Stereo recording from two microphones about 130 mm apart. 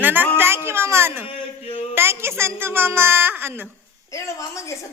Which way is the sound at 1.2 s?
45° left (ahead or behind).